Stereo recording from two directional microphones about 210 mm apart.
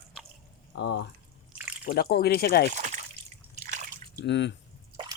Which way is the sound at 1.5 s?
10° right (ahead or behind).